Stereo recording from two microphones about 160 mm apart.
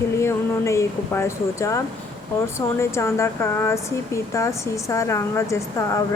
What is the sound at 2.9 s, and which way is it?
Speech, 15° left (ahead or behind).